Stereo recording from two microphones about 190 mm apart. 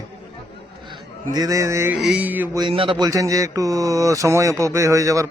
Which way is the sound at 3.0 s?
15° right (ahead or behind).